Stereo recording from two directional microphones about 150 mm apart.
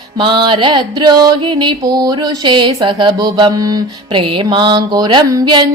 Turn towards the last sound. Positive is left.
turn(degrees=-25)  # may be behind; listen again after turning